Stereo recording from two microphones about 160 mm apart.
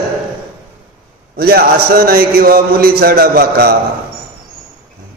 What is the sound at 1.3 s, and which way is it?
A man's voice, 70° right (ahead or behind).